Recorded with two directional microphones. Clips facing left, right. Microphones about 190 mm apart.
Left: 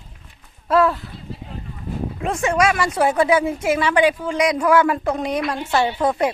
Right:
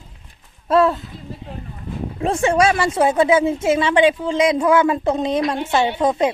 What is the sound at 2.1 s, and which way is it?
Speech, 30° right (ahead or behind).